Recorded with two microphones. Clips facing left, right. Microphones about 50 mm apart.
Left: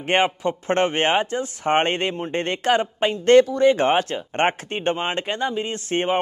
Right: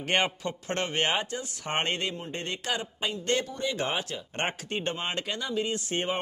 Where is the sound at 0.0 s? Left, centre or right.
Left.